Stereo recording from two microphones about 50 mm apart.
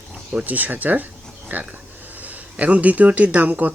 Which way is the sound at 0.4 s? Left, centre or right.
Right.